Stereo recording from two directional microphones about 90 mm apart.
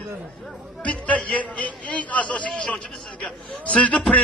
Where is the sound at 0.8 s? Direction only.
15° left (ahead or behind).